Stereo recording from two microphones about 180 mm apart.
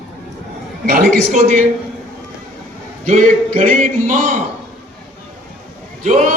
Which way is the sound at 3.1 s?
45° right (ahead or behind).